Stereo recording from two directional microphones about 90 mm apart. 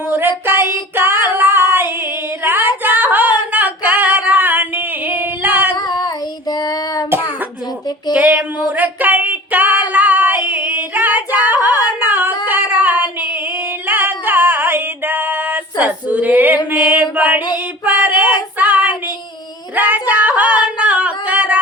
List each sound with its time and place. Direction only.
0.1 s child singing: 25° right (ahead or behind)
2.4 s singing: 25° right (ahead or behind)
5.7 s child singing: 50° left (ahead or behind)
8.1 s a sound: 15° right (ahead or behind)
9.9 s singing: 20° right (ahead or behind)
12.5 s child singing: 20° right (ahead or behind)
13.8 s female singing: 20° right (ahead or behind)
16.7 s chant: 15° right (ahead or behind)
18.5 s child singing: 20° right (ahead or behind)
19.7 s a sound: 20° right (ahead or behind)
20.6 s singing: 15° right (ahead or behind)